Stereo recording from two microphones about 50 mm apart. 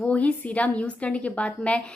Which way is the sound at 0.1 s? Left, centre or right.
Left.